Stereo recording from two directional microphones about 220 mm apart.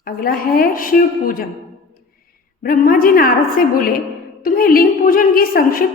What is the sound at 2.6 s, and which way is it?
A woman's voice, 40° left (ahead or behind).